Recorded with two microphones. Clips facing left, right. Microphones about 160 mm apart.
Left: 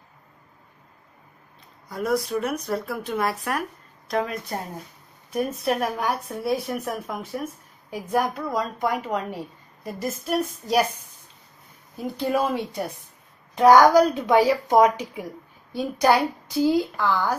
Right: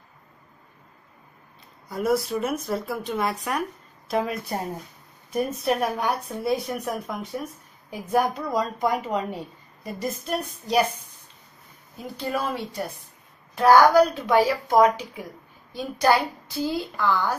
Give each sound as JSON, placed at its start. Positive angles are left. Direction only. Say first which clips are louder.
{"t": 1.9, "sound": "a woman's voice", "louder": "right 1 dB", "side_deg": 0}
{"t": 12.2, "sound": "a woman's voice", "louder": "left 4 dB", "side_deg": 20}